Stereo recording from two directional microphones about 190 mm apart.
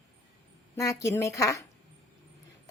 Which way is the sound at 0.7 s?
15° left (ahead or behind).